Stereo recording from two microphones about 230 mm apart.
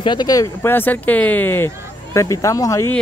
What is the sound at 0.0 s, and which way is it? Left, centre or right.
Speech, centre.